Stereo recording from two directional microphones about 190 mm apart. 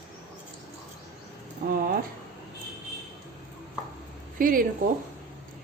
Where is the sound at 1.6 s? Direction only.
50° right (ahead or behind).